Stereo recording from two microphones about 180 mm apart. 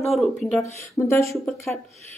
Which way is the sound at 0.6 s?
15° left (ahead or behind).